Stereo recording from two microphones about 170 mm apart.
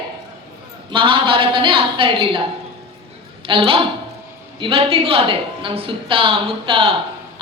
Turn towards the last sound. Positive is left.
turn(degrees=-30)  # may be behind; listen again after turning